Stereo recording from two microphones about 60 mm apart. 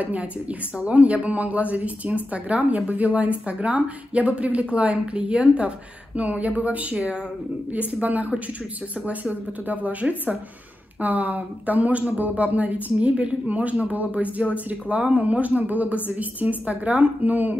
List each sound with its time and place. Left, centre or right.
0.0 s a woman's voice: right